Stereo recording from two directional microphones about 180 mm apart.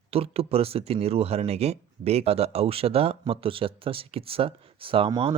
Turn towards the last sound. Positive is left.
turn(degrees=-30)  # may be behind; listen again after turning